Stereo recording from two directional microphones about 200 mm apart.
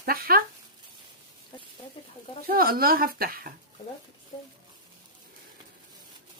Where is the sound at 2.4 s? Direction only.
50° right (ahead or behind).